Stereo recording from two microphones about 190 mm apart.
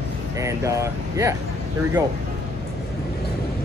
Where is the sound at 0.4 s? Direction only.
15° right (ahead or behind).